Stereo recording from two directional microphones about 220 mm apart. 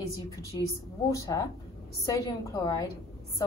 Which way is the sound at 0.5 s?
15° left (ahead or behind).